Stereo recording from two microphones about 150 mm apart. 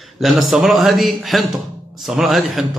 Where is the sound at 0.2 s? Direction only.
Centre (ahead or behind).